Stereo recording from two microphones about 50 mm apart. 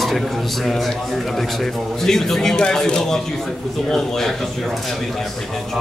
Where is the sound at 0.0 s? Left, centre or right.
Centre.